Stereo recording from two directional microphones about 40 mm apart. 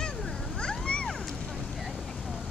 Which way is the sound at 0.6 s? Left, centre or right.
Left.